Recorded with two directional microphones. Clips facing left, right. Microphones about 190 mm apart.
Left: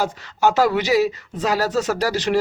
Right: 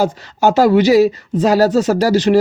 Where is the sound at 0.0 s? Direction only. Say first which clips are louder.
Right 5 dB; 35° right (ahead or behind).